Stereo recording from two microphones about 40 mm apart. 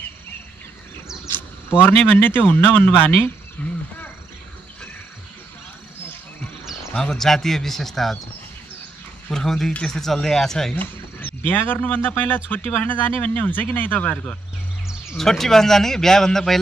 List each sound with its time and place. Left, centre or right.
1.7 s speech: left
2.5 s speech: left
3.6 s wild animals: left
6.6 s a sound: centre
7.0 s speech: centre
9.3 s speech: centre
10.8 s speech: left
11.8 s speech: left
12.7 s speech: left
15.1 s speech: centre